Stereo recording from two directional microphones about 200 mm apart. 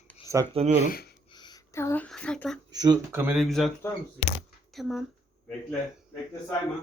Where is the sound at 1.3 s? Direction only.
20° left (ahead or behind); by 2.6 s 5° left (ahead or behind).